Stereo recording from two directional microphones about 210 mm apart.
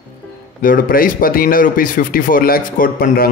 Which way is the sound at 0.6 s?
45° left (ahead or behind).